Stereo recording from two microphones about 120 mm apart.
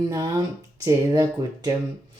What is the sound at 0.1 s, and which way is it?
Speech, 30° right (ahead or behind).